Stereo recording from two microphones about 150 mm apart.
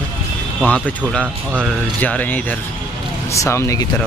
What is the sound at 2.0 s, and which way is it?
Speech, 10° left (ahead or behind).